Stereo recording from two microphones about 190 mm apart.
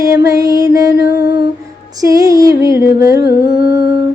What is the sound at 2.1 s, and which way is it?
Music, 15° right (ahead or behind).